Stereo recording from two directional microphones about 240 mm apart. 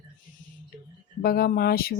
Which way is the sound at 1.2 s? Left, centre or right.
Left.